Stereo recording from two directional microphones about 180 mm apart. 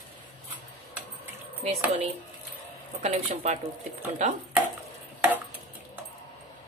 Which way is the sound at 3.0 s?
40° right (ahead or behind).